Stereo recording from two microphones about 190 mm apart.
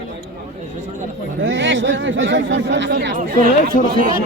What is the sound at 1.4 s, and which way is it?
Speech, 75° right (ahead or behind).